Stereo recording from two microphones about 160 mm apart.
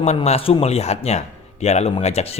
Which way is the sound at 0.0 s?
40° left (ahead or behind).